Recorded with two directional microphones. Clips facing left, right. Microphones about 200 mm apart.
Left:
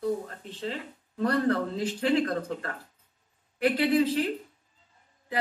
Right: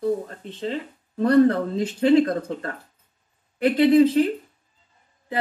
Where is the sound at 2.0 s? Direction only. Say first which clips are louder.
Right 9 dB; 25° right (ahead or behind).